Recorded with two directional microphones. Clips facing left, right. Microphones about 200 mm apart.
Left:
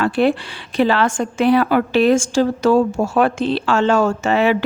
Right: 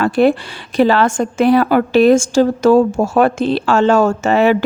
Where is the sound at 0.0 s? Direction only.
45° right (ahead or behind).